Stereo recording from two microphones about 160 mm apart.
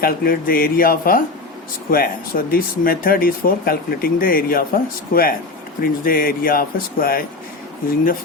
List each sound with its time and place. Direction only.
0.0 s speech: 65° left (ahead or behind)